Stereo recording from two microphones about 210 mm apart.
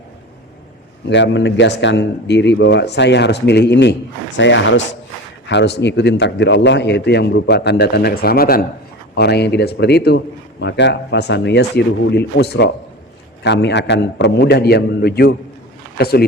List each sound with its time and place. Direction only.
1.1 s a man's voice: 55° left (ahead or behind)